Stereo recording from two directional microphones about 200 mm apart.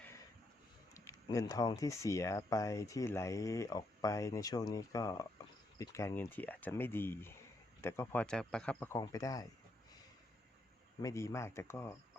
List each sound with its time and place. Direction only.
0.9 s speech: 15° left (ahead or behind)
11.0 s speech: 15° left (ahead or behind)